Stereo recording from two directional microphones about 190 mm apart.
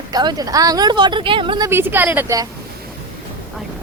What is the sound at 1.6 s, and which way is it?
Speech, 10° right (ahead or behind).